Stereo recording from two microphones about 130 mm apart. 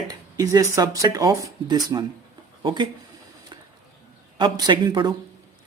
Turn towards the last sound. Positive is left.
turn(degrees=-35)  # may be behind; listen again after turning